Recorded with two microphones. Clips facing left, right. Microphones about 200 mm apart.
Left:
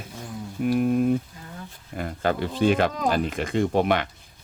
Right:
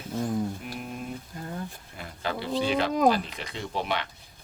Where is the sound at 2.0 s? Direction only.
50° left (ahead or behind).